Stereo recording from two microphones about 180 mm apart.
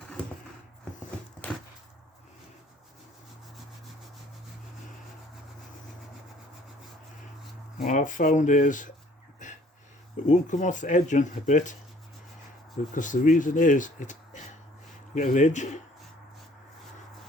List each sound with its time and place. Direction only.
7.8 s speech: 45° left (ahead or behind)
9.4 s a sound: 45° left (ahead or behind)
10.2 s speech: 45° left (ahead or behind)
12.9 s speech: 45° left (ahead or behind)